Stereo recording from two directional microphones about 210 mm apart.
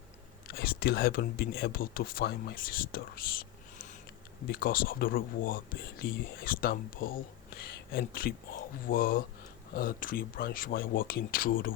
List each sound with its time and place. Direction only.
0.4 s speech: 45° left (ahead or behind)